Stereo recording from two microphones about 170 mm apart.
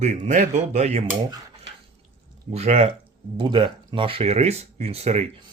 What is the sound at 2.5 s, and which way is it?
Speech, 40° right (ahead or behind).